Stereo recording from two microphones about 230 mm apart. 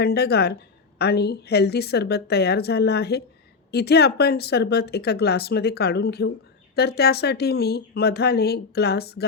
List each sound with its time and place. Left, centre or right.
0.0 s speech: left